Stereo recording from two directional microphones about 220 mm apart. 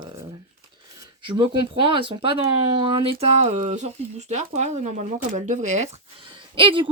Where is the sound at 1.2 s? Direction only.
20° right (ahead or behind).